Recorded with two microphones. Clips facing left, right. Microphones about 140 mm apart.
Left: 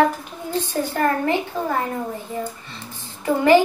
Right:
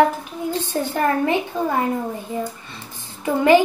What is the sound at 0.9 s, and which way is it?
Speech, 15° right (ahead or behind).